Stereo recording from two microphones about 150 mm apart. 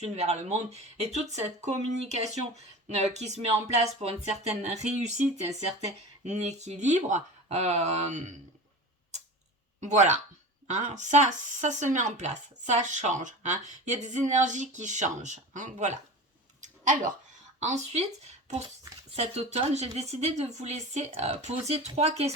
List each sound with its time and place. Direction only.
0.0 s speech: 45° right (ahead or behind)
9.8 s speech: 50° right (ahead or behind)
16.6 s a sound: 55° right (ahead or behind)
17.6 s speech: 50° right (ahead or behind)